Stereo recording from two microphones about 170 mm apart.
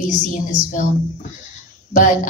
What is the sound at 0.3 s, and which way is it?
Speech, 50° left (ahead or behind).